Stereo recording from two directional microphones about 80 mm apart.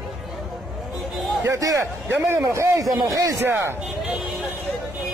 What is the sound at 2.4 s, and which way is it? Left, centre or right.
Speech, right.